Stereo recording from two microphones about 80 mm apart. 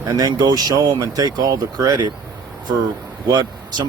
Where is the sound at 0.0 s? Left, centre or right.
Right.